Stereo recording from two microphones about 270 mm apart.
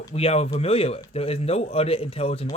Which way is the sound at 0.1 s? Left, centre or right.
Left.